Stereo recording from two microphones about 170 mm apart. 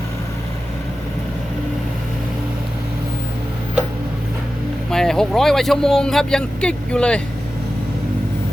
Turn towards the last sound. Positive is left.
turn(degrees=5)  # may be behind; listen again after turning